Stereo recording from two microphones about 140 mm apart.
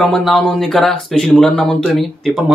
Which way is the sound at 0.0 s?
5° left (ahead or behind).